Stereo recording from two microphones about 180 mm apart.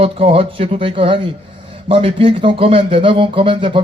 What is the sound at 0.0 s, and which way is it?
Speech, 30° right (ahead or behind).